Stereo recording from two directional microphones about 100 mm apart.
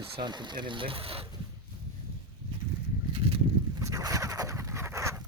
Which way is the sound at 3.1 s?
65° right (ahead or behind).